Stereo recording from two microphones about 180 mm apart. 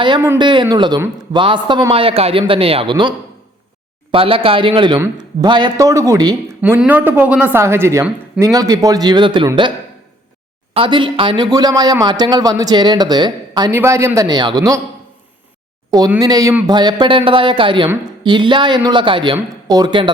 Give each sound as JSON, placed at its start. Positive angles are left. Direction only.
{"t": 0.2, "sound": "a man's voice", "side_deg": -20}
{"t": 6.6, "sound": "speech", "side_deg": -10}
{"t": 10.8, "sound": "a man's voice", "side_deg": -25}
{"t": 15.9, "sound": "a man's voice", "side_deg": -20}